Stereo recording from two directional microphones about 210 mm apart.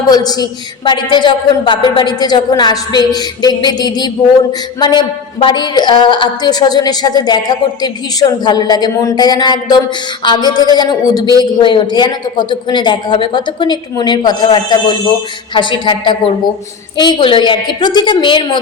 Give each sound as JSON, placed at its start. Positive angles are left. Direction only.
{"t": 0.1, "sound": "a woman's voice", "side_deg": 20}